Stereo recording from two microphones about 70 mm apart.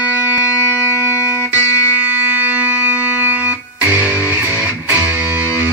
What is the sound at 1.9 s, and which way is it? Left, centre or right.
Music, right.